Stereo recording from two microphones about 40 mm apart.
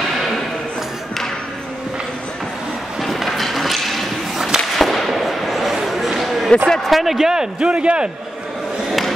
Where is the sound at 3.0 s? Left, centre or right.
Centre.